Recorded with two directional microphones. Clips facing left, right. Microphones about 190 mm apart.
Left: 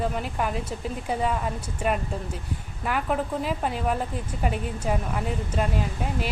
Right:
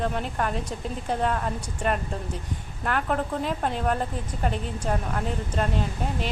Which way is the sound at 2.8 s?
5° left (ahead or behind).